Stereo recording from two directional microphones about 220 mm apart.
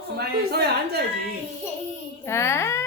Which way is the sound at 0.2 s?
45° right (ahead or behind).